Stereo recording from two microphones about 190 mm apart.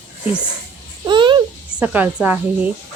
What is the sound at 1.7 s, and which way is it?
Speech, 5° right (ahead or behind).